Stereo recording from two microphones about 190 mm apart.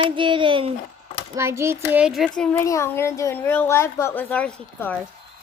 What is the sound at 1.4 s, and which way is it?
A child's voice, 15° right (ahead or behind).